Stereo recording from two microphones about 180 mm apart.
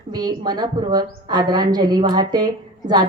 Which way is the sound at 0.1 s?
20° right (ahead or behind).